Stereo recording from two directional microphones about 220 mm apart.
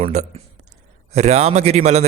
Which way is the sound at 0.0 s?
30° right (ahead or behind).